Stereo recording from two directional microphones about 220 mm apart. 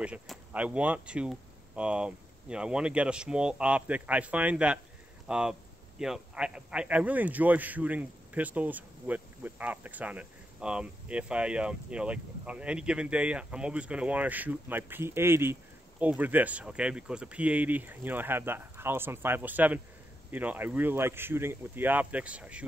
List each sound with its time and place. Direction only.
0.0 s a man's voice: 5° right (ahead or behind)